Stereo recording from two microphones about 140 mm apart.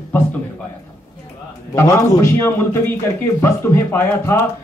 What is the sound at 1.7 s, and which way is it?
A man's voice, 20° left (ahead or behind).